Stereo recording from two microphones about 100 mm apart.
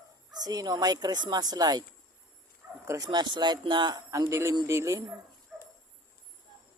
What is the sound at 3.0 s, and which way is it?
Speech, 45° right (ahead or behind).